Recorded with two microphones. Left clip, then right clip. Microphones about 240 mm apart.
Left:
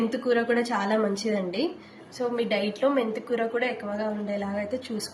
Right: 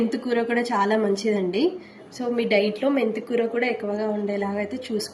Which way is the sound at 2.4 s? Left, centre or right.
Left.